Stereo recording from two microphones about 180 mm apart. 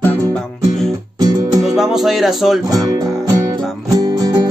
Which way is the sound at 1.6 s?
Centre (ahead or behind).